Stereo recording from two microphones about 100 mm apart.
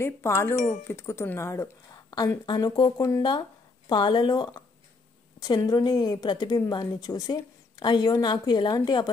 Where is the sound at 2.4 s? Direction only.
50° left (ahead or behind).